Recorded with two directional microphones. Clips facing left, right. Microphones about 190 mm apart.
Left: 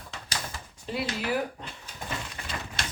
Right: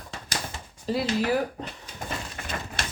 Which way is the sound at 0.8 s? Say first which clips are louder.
Right 6 dB; 35° right (ahead or behind).